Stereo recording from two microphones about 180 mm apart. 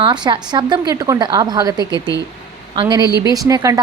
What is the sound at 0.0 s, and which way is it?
A woman's voice, 25° right (ahead or behind).